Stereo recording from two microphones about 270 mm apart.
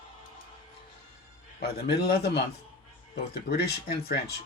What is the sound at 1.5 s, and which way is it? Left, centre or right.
Speech, left.